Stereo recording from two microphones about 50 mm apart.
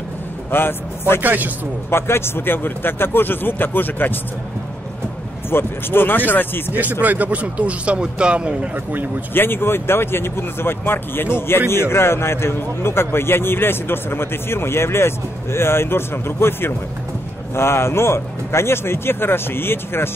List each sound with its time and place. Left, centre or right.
0.5 s speech: left
1.2 s speech: right
1.9 s speech: left
5.5 s speech: left
6.7 s speech: right
9.3 s a man's voice: left